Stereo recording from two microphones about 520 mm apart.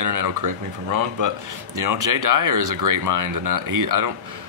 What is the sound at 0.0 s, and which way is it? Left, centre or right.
Speech, right.